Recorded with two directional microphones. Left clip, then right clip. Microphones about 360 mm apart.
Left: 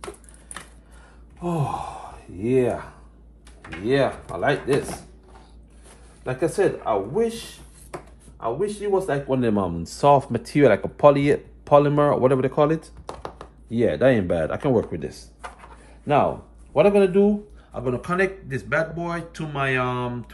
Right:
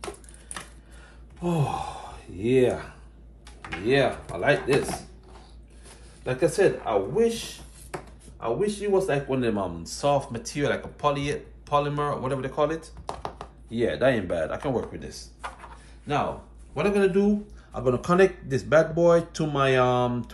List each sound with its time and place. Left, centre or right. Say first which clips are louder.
0.0 s chopping: even; centre
1.4 s speech: left 1 dB; centre
9.3 s speech: left 4 dB; centre
13.0 s chopping: right 1 dB; centre
13.7 s a man's voice: left 4 dB; centre
15.4 s a sound: right 1 dB; centre
16.7 s a man's voice: left 6 dB; centre